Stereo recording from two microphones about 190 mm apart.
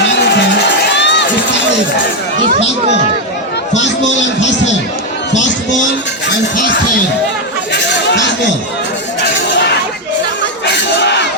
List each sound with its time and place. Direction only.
0.9 s crowd: 65° left (ahead or behind)
3.8 s music: 70° left (ahead or behind)
7.7 s chatter: 65° left (ahead or behind)
10.7 s battle cry: 65° left (ahead or behind)